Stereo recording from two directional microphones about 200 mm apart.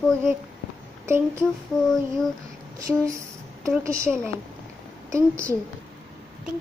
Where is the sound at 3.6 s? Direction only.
15° right (ahead or behind).